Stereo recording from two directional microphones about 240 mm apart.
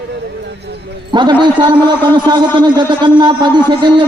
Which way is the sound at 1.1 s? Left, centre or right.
Centre.